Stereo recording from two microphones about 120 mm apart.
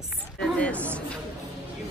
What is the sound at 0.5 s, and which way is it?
Speech, 10° left (ahead or behind).